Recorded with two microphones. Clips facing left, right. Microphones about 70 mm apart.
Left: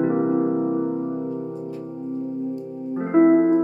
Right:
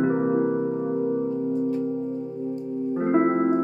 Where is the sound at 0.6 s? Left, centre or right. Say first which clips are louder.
Left 1 dB; left.